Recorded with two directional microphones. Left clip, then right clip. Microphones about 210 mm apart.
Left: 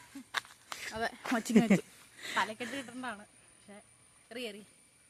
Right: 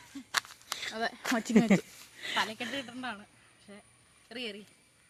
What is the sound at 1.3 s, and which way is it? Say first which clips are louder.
Speech: right 2 dB; centre (ahead or behind).